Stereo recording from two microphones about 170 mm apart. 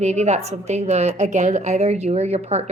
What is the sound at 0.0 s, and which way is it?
A woman's voice, 40° right (ahead or behind).